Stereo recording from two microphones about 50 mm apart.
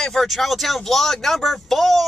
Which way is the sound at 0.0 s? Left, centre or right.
Centre.